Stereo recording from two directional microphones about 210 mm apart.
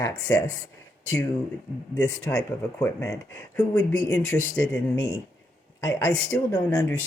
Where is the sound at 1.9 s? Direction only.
15° left (ahead or behind).